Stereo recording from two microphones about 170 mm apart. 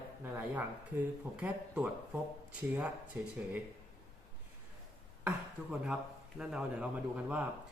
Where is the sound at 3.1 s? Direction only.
10° right (ahead or behind).